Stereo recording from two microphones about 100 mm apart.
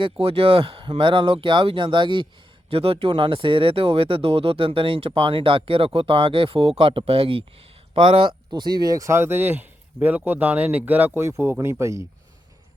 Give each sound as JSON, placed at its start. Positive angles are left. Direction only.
{"t": 0.0, "sound": "speech", "side_deg": -70}
{"t": 2.6, "sound": "speech", "side_deg": -75}